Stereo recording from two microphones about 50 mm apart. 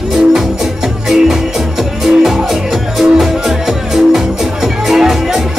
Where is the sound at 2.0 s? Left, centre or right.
Centre.